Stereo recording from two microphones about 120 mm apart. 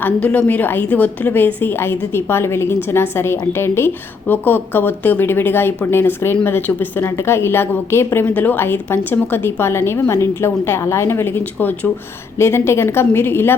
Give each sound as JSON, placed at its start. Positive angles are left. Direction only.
{"t": 0.0, "sound": "a woman's voice", "side_deg": 10}